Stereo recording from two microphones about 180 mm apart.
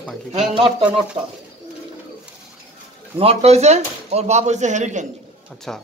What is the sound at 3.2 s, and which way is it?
Speech, 35° right (ahead or behind).